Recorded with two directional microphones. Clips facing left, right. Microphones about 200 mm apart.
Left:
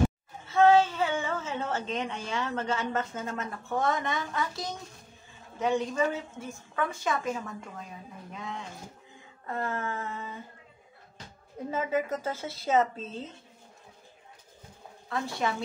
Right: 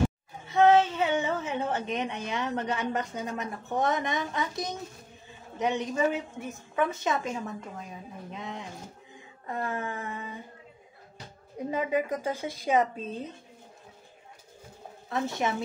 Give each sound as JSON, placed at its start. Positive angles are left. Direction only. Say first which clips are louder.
{"t": 0.5, "sound": "a woman's voice", "louder": "even", "side_deg": -20}
{"t": 8.3, "sound": "a sound", "louder": "even", "side_deg": -20}
{"t": 9.5, "sound": "a woman's voice", "louder": "even", "side_deg": -15}
{"t": 11.5, "sound": "a woman's voice", "louder": "right 1 dB", "side_deg": -15}
{"t": 15.0, "sound": "a woman's voice", "louder": "right 2 dB", "side_deg": -20}